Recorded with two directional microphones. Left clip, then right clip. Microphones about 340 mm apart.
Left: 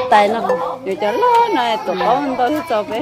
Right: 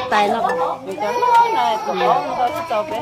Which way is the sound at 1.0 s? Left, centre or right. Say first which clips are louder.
Left 1 dB; left.